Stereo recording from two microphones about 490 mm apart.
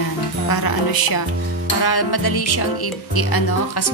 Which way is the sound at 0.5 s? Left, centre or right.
Left.